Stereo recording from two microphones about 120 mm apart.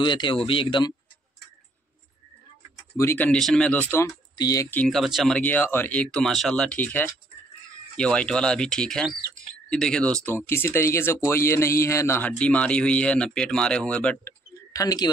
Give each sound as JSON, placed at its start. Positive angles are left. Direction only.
{"t": 0.0, "sound": "speech", "side_deg": 40}
{"t": 3.0, "sound": "speech", "side_deg": 20}
{"t": 3.3, "sound": "speech", "side_deg": 5}
{"t": 4.4, "sound": "speech", "side_deg": 30}
{"t": 4.8, "sound": "speech", "side_deg": 0}
{"t": 5.4, "sound": "speech", "side_deg": 15}
{"t": 14.7, "sound": "speech", "side_deg": 30}